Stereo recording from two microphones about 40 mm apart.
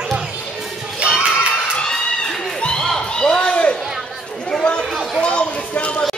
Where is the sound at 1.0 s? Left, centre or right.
Right.